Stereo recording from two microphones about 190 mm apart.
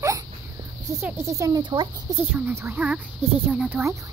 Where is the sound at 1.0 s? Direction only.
15° right (ahead or behind).